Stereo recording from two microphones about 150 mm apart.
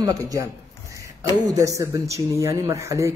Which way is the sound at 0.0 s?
25° right (ahead or behind).